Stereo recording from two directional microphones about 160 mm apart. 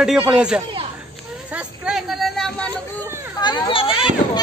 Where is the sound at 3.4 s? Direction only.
30° left (ahead or behind).